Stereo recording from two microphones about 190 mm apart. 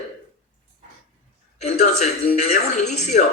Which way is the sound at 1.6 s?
35° left (ahead or behind).